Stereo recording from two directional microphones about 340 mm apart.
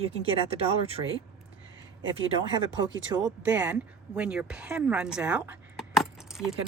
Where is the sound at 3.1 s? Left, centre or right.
Centre.